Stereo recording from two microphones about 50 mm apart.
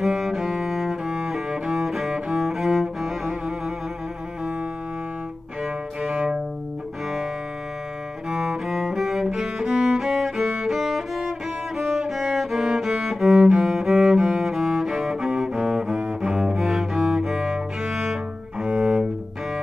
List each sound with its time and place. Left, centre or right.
0.0 s music: centre
5.6 s music: centre
8.3 s music: centre
17.8 s cello: centre